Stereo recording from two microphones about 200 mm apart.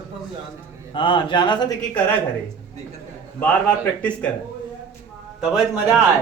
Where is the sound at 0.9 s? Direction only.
25° left (ahead or behind).